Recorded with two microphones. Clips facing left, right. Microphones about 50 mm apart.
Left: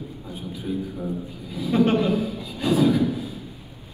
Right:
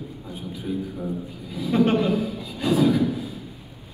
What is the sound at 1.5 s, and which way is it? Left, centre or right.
A man's voice, right.